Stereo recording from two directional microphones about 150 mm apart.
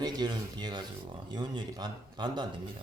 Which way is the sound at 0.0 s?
25° right (ahead or behind).